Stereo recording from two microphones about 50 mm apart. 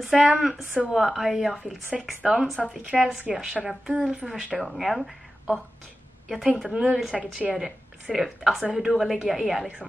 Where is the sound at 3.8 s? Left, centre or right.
Centre.